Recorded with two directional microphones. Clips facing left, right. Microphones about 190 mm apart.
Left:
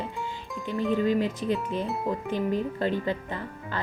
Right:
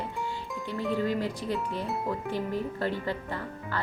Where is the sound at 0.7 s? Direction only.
20° left (ahead or behind).